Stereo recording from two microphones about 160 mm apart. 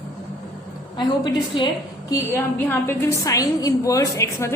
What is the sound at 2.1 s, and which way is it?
A woman's voice, 15° left (ahead or behind).